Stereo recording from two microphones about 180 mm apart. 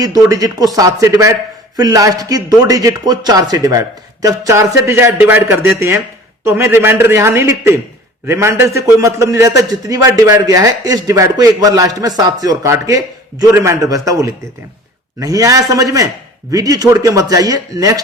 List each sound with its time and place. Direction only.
0.0 s a man's voice: 20° right (ahead or behind)